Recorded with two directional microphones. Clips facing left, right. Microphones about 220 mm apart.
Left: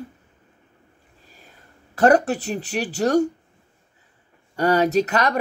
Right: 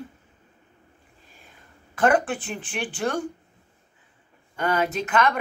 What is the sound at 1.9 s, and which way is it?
Speech, 40° left (ahead or behind).